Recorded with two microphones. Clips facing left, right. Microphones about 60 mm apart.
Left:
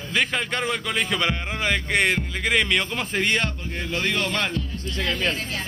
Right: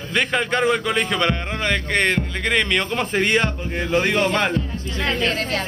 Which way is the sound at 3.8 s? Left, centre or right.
Right.